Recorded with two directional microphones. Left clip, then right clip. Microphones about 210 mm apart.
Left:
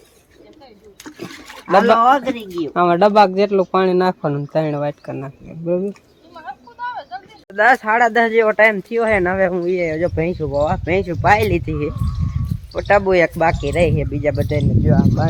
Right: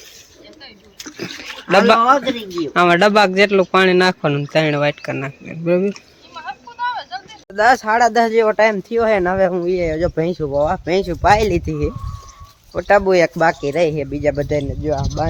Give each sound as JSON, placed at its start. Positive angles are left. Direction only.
{"t": 1.2, "sound": "speech", "side_deg": 0}
{"t": 5.9, "sound": "a sound", "side_deg": 50}
{"t": 7.5, "sound": "speech", "side_deg": -10}
{"t": 12.7, "sound": "speech", "side_deg": -10}